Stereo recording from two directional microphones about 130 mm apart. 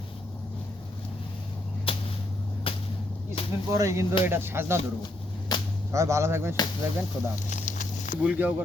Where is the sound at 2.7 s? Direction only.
45° left (ahead or behind).